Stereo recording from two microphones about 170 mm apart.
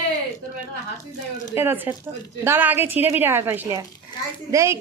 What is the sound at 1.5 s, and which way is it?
A woman's voice, 15° right (ahead or behind).